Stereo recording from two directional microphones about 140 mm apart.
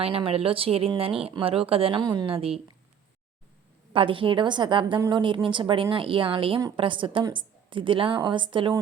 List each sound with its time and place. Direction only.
0.0 s a woman's voice: 45° right (ahead or behind)
2.0 s a woman's voice: 30° right (ahead or behind)
3.9 s a woman's voice: 40° right (ahead or behind)